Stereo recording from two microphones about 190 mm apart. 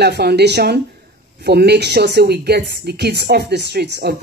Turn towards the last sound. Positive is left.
turn(degrees=-60)  # may be behind; listen again after turning